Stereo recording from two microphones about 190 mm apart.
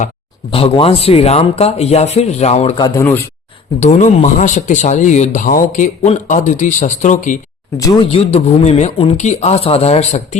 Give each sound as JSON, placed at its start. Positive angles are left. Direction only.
{"t": 0.5, "sound": "speech", "side_deg": 30}
{"t": 2.7, "sound": "speech", "side_deg": 20}
{"t": 3.8, "sound": "speech", "side_deg": 40}